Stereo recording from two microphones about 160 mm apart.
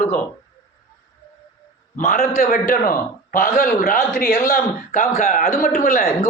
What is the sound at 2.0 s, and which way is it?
Speech, 50° left (ahead or behind).